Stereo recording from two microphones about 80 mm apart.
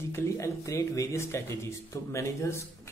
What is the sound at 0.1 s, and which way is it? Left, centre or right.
Speech, left.